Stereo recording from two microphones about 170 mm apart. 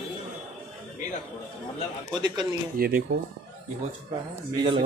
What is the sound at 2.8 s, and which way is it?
Speech, 60° right (ahead or behind).